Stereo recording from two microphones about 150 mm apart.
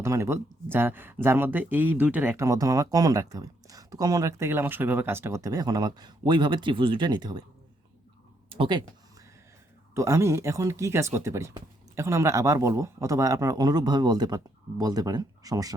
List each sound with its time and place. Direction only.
0.0 s speech: 20° right (ahead or behind)
8.4 s speech: 35° right (ahead or behind)
9.9 s speech: 20° right (ahead or behind)